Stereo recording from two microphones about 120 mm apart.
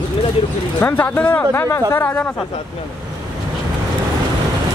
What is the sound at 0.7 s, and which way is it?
A man's voice, 15° left (ahead or behind).